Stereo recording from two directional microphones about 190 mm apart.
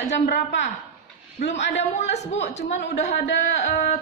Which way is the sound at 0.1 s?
65° left (ahead or behind).